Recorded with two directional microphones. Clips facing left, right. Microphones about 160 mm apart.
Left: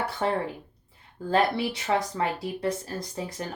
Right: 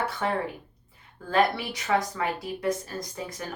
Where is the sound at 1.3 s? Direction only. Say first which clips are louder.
Even; 30° left (ahead or behind).